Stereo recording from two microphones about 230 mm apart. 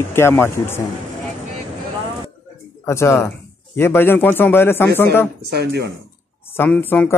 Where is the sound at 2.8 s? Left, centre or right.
Centre.